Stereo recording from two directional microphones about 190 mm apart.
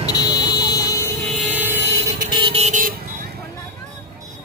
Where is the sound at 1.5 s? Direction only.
10° right (ahead or behind).